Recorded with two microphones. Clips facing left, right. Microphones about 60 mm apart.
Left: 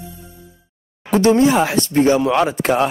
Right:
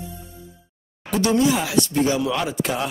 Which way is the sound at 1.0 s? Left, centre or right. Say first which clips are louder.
Left 6 dB; left.